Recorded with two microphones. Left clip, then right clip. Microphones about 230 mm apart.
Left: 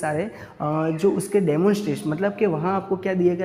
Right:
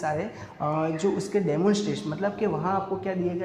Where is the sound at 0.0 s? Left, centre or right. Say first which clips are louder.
Left 3 dB; left.